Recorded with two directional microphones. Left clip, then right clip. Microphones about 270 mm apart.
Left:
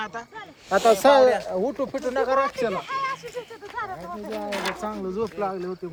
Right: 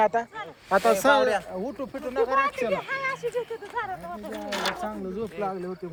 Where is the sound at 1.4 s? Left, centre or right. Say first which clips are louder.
Left 7 dB; left.